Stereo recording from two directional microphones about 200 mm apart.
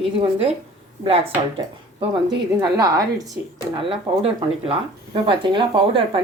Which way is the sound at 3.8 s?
30° right (ahead or behind).